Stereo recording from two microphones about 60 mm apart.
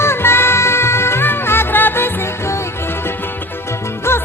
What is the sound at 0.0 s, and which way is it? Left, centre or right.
Music, left.